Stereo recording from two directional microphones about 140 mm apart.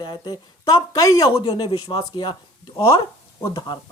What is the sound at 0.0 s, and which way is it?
Speech, 35° left (ahead or behind).